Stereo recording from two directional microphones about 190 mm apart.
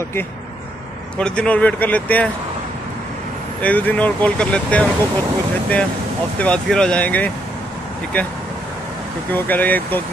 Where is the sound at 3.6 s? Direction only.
10° left (ahead or behind).